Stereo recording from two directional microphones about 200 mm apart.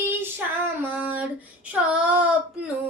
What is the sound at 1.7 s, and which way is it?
Child singing, 5° right (ahead or behind).